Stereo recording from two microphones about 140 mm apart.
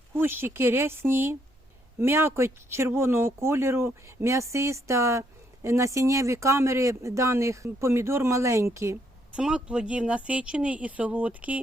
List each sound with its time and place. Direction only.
0.1 s a man's voice: 15° right (ahead or behind)
9.3 s speech: 5° right (ahead or behind)